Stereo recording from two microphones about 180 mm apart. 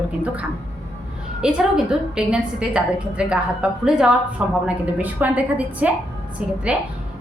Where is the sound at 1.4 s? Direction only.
5° right (ahead or behind).